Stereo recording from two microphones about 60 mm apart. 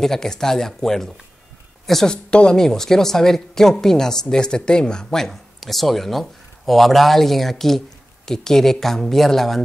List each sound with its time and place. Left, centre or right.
0.0 s a woman's voice: centre